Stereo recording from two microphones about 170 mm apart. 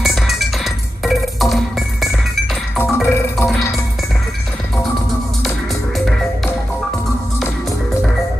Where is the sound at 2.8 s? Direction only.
15° left (ahead or behind).